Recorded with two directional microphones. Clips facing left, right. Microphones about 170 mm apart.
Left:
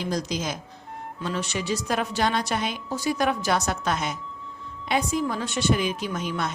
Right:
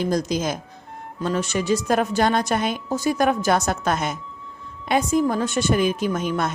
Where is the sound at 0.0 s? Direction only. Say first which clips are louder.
Right 6 dB; 50° right (ahead or behind).